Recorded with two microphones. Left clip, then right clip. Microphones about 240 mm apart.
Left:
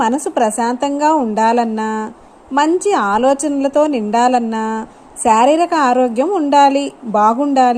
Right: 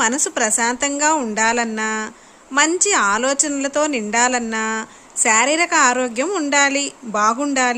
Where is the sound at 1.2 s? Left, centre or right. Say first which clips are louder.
Left 5 dB; centre.